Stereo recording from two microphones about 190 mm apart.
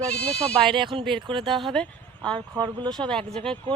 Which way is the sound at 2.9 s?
5° left (ahead or behind).